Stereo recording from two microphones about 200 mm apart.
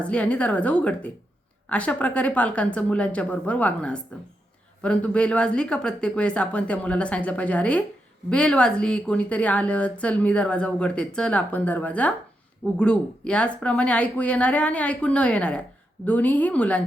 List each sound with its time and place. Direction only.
0.0 s speech: 5° left (ahead or behind)